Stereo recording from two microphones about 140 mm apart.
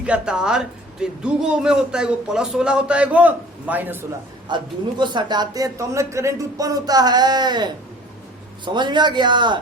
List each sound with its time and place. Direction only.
0.0 s speech: 5° right (ahead or behind)
4.4 s a man's voice: 35° right (ahead or behind)